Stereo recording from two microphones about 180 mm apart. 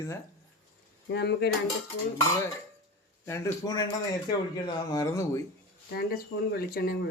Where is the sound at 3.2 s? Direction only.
15° left (ahead or behind).